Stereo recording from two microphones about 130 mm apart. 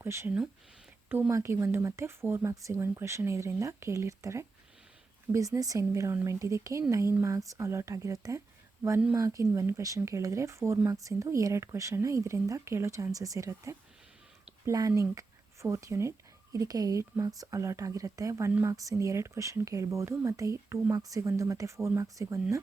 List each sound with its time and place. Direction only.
0.0 s speech: 20° right (ahead or behind)
5.5 s speech: 25° right (ahead or behind)